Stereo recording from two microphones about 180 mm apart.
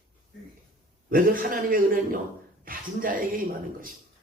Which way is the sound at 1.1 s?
50° right (ahead or behind).